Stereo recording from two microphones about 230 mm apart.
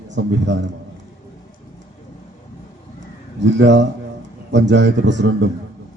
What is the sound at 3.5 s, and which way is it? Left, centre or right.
A man's voice, right.